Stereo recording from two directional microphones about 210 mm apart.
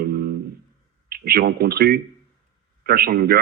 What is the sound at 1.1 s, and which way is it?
A man's voice, 45° right (ahead or behind).